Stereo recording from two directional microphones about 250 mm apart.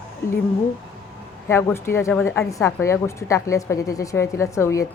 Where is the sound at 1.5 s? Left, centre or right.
Centre.